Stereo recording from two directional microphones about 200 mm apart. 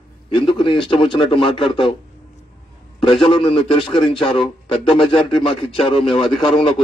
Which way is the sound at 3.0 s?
25° left (ahead or behind).